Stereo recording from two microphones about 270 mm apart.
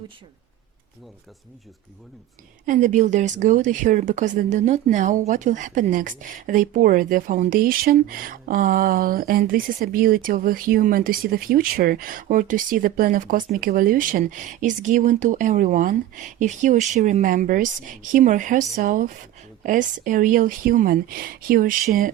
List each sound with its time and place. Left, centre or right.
2.6 s speech: right